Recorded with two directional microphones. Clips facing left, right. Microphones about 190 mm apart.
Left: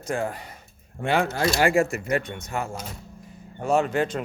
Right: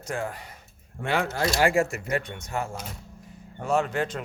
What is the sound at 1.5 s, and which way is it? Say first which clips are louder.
Speech: left 1 dB; 50° left (ahead or behind).